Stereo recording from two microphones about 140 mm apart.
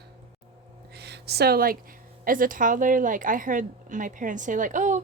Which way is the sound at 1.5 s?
90° right.